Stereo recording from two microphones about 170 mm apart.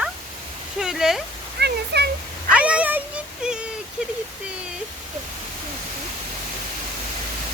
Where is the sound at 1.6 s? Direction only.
80° right.